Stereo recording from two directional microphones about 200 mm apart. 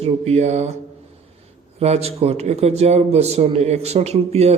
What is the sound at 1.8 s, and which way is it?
A man's voice, 30° right (ahead or behind).